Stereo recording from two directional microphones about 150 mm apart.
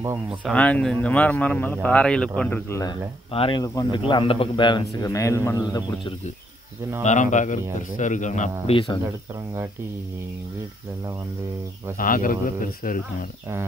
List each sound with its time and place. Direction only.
0.5 s speech: 10° left (ahead or behind)
2.7 s a man's voice: 25° left (ahead or behind)
3.3 s a man's voice: 40° left (ahead or behind)
3.6 s a man's voice: 25° left (ahead or behind)
4.0 s a man's voice: 35° left (ahead or behind)
5.0 s a man's voice: 20° left (ahead or behind)
7.0 s speech: 55° left (ahead or behind)
8.7 s a man's voice: 35° left (ahead or behind)
12.0 s speech: 65° left (ahead or behind)